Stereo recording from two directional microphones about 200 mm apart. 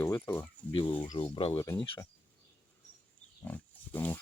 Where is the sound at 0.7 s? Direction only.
25° left (ahead or behind).